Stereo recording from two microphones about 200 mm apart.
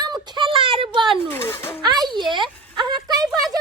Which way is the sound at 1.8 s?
20° right (ahead or behind).